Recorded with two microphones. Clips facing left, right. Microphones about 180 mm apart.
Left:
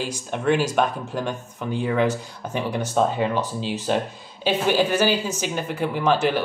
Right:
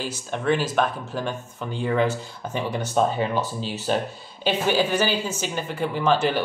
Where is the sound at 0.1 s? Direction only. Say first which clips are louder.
Left 2 dB; 5° left (ahead or behind).